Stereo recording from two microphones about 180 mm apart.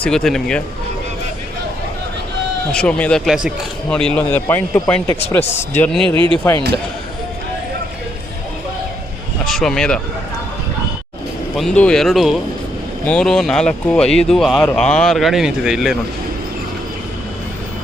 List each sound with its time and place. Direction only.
0.0 s speech: 5° left (ahead or behind)
2.7 s speech: 5° left (ahead or behind)
6.1 s speech: 30° right (ahead or behind)
9.5 s speech: centre (ahead or behind)
11.5 s speech: 5° left (ahead or behind)